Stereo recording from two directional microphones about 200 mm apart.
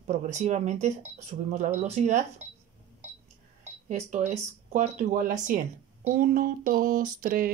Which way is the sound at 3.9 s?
35° right (ahead or behind).